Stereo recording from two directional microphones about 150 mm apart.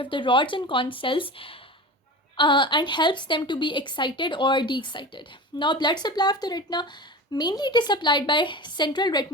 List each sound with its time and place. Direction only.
0.0 s a woman's voice: 35° left (ahead or behind)